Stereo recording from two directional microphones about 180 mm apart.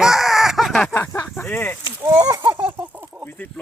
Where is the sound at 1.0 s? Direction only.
15° left (ahead or behind).